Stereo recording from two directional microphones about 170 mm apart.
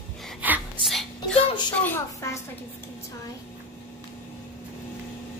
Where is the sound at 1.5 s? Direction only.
25° left (ahead or behind).